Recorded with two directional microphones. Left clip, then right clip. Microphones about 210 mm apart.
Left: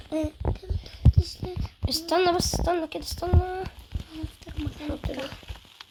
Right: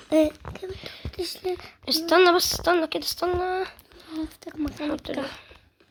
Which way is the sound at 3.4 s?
Centre (ahead or behind).